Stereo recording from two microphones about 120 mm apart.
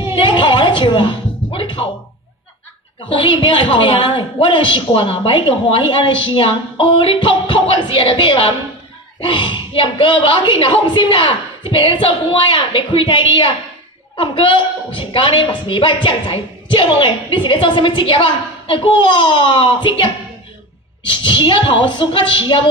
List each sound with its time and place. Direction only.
0.1 s music: 40° left (ahead or behind)
3.1 s a woman's voice: 40° left (ahead or behind)